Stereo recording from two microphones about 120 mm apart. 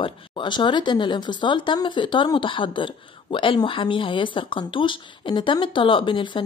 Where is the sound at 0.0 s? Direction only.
40° left (ahead or behind).